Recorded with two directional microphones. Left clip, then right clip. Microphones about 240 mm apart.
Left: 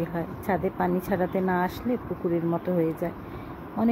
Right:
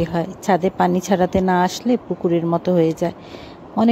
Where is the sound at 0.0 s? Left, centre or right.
Right.